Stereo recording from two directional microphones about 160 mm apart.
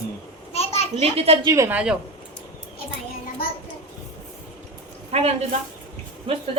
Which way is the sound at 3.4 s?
70° left (ahead or behind).